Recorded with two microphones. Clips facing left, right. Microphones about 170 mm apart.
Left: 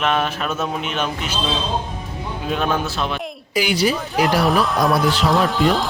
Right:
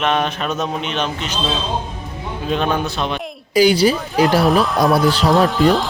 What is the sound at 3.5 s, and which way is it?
Speech, 35° right (ahead or behind).